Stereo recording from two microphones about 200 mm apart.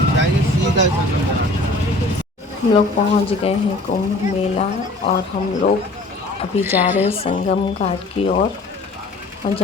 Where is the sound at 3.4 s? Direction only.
30° left (ahead or behind).